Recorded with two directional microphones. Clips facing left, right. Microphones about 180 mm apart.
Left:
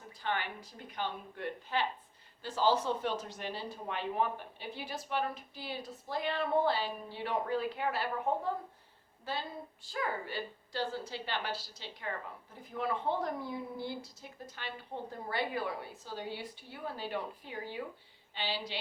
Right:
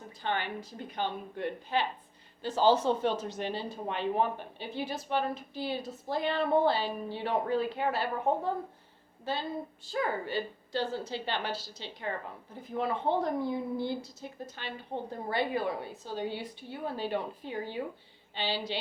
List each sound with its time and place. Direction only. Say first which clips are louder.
0.2 s speech: right 3 dB; 25° right (ahead or behind)